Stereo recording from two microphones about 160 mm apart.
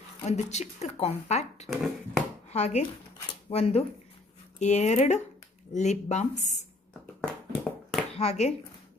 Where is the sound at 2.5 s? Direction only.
45° left (ahead or behind).